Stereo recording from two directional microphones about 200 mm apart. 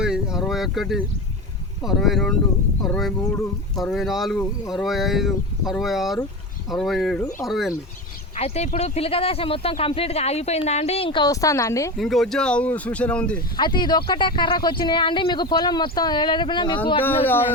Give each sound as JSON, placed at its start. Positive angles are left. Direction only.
{"t": 0.0, "sound": "a sound", "side_deg": -5}
{"t": 1.8, "sound": "speech", "side_deg": 0}
{"t": 8.4, "sound": "speech", "side_deg": 30}
{"t": 11.9, "sound": "speech", "side_deg": 0}
{"t": 13.6, "sound": "speech", "side_deg": 20}